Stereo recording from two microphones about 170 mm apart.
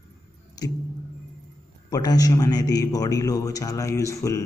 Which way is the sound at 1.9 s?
20° left (ahead or behind).